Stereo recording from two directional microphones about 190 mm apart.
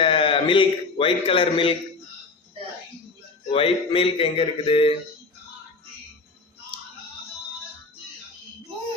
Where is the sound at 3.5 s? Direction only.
30° left (ahead or behind).